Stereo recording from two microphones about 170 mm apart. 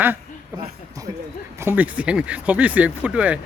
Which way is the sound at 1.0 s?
20° right (ahead or behind).